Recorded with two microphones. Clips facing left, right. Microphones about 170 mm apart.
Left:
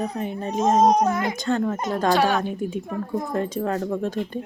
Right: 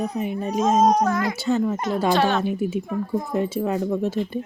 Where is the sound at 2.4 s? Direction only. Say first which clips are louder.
Right 3 dB; 5° right (ahead or behind).